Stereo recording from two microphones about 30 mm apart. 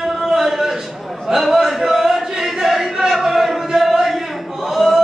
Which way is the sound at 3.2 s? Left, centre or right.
Centre.